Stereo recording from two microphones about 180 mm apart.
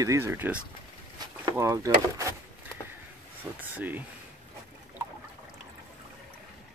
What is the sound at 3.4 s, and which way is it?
Speech, 10° right (ahead or behind).